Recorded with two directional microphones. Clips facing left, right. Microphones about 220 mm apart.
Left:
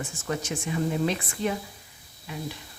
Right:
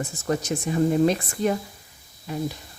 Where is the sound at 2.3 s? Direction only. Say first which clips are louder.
Right 7 dB; 40° right (ahead or behind).